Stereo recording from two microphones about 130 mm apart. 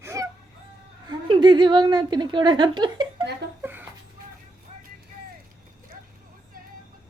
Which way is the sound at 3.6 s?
15° right (ahead or behind).